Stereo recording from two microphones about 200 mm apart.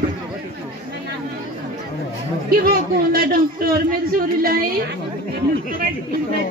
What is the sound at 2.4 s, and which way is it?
A man's voice, 50° right (ahead or behind).